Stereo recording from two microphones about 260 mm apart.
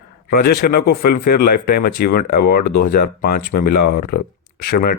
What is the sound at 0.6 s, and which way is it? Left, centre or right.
Speech, left.